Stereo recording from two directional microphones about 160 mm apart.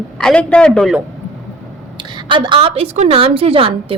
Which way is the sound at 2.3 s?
30° right (ahead or behind).